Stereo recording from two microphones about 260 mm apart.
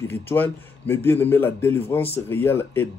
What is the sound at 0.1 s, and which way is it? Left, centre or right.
Speech, centre.